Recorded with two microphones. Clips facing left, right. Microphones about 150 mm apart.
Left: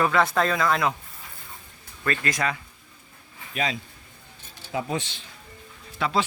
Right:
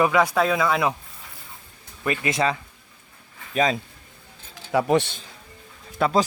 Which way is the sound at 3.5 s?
45° right (ahead or behind).